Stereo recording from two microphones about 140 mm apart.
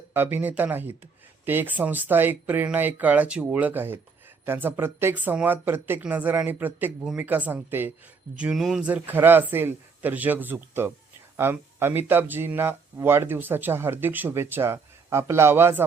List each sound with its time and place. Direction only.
0.1 s speech: 15° right (ahead or behind)
7.0 s speech: centre (ahead or behind)
8.4 s speech: 5° right (ahead or behind)